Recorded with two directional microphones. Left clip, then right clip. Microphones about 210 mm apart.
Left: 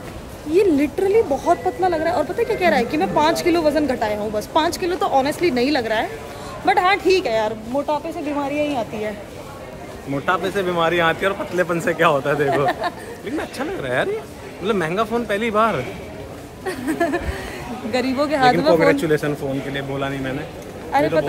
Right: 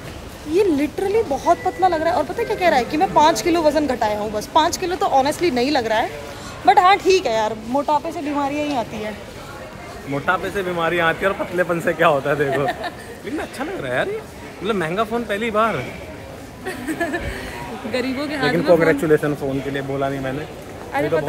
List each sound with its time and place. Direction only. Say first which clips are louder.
0.5 s speech: left 1 dB; 10° left (ahead or behind)
10.4 s speech: left 2 dB; 15° left (ahead or behind)
16.6 s speech: left 3 dB; 30° left (ahead or behind)
18.7 s speech: right 4 dB; 5° left (ahead or behind)
19.2 s speech: right 1 dB; 15° right (ahead or behind)
20.9 s speech: left 3 dB; 15° left (ahead or behind)